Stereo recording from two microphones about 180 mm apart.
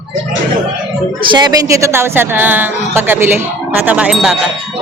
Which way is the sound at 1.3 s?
25° right (ahead or behind).